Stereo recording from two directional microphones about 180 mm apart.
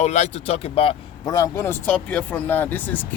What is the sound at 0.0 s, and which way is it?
Speech, 40° left (ahead or behind).